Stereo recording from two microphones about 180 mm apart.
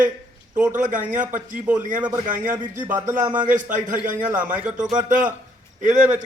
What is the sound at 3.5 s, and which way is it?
Speech, 45° right (ahead or behind).